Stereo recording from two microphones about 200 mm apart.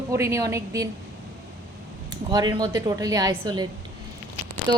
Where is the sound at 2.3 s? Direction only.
20° right (ahead or behind).